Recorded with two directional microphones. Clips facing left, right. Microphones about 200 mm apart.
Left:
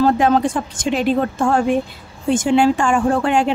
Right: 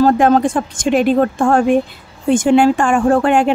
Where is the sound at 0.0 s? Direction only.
45° right (ahead or behind).